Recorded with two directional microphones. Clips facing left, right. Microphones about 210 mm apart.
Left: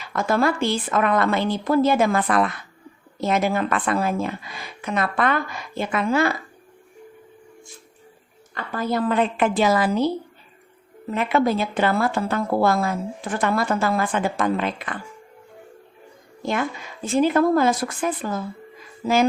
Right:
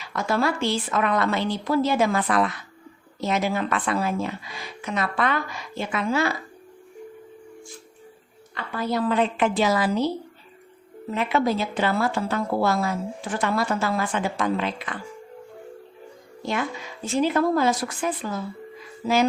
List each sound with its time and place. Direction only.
0.0 s a woman's voice: 50° left (ahead or behind)
8.5 s a woman's voice: 45° left (ahead or behind)
11.1 s a woman's voice: 55° left (ahead or behind)
16.4 s a woman's voice: 50° left (ahead or behind)